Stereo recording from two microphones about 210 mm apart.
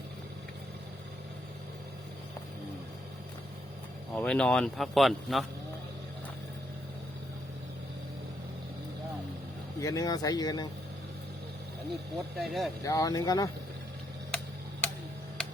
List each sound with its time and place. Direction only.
4.1 s speech: 5° left (ahead or behind)
9.8 s speech: 15° left (ahead or behind)
12.1 s speech: centre (ahead or behind)
12.8 s speech: 15° left (ahead or behind)
14.3 s tick-tock: 5° left (ahead or behind)